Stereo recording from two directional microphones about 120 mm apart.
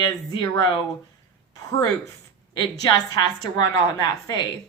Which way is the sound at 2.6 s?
40° left (ahead or behind).